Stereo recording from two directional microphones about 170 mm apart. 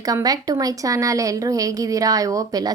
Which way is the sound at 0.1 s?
20° right (ahead or behind).